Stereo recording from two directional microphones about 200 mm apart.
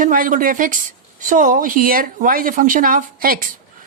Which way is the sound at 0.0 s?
45° right (ahead or behind).